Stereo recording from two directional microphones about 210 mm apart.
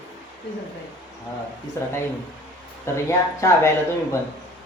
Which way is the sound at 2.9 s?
15° left (ahead or behind).